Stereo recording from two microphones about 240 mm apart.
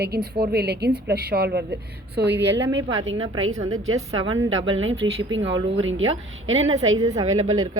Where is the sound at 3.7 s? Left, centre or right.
Right.